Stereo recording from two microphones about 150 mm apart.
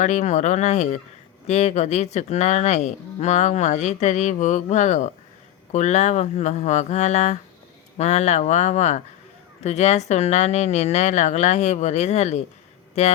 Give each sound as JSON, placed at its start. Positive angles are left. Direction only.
{"t": 0.0, "sound": "speech", "side_deg": 55}